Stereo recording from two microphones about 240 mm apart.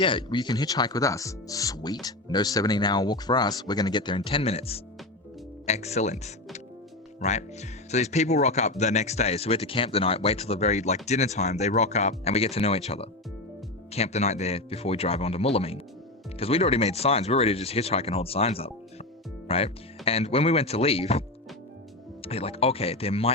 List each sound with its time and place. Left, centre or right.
0.0 s speech: centre